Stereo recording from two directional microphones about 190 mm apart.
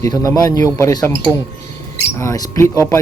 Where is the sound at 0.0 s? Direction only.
15° left (ahead or behind).